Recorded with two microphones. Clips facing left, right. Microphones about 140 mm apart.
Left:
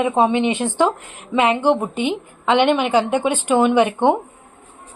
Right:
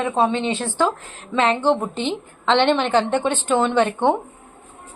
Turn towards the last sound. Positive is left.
turn(degrees=10)  # may be behind; listen again after turning